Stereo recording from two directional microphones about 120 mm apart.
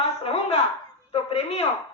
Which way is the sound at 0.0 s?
55° left (ahead or behind).